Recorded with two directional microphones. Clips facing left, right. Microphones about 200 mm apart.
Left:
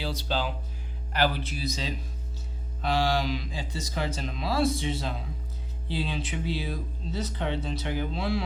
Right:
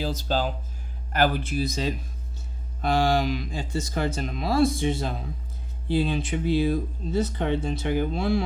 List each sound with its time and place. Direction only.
0.0 s speech: 45° right (ahead or behind)